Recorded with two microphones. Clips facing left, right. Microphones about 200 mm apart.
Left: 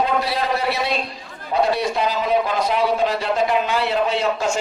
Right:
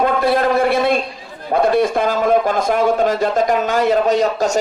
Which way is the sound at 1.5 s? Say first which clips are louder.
Right 5 dB; 50° right (ahead or behind).